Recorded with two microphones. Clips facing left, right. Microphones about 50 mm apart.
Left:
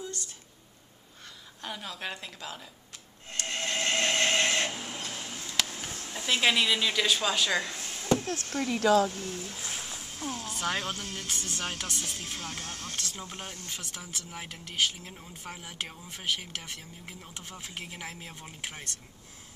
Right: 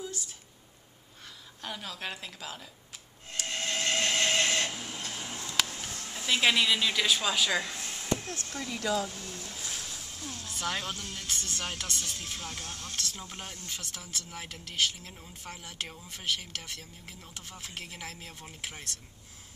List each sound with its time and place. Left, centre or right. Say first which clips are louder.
0.0 s a sound: even; centre
1.6 s a woman's voice: left 1 dB; centre
3.3 s printer: left 1 dB; centre
5.7 s a sound: left 1 dB; left
6.0 s a woman's voice: even; centre
8.5 s speech: left 8 dB; left
9.4 s a sound: left 2 dB; centre
10.7 s a woman's voice: left 2 dB; centre
12.4 s speech: left 2 dB; left
12.9 s speech: left 1 dB; centre